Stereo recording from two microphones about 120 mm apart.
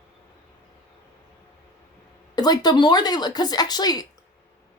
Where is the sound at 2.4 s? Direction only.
35° left (ahead or behind).